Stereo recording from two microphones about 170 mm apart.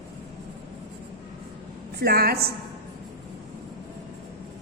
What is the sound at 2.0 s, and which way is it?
Speech, 65° right (ahead or behind).